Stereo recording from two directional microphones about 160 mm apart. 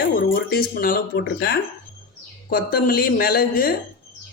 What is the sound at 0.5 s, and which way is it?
Speech, 65° left (ahead or behind).